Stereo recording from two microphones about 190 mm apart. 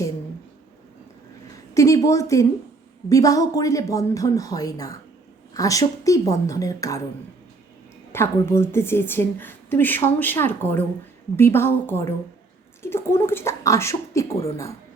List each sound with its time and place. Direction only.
1.7 s a woman's voice: 15° left (ahead or behind)
8.1 s a woman's voice: 15° left (ahead or behind)